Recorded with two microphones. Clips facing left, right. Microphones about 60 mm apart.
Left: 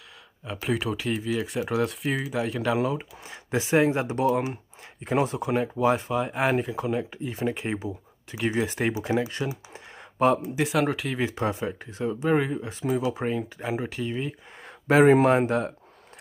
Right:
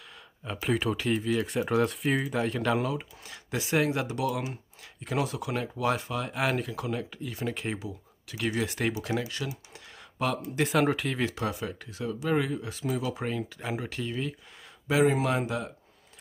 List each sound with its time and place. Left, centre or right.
0.5 s speech: centre
3.3 s speech: left
4.0 s speech: left
5.6 s speech: left
10.4 s speech: centre
11.3 s speech: left; by 14.3 s centre
14.9 s speech: left